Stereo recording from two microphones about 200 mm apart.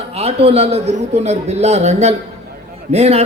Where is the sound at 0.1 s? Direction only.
30° right (ahead or behind).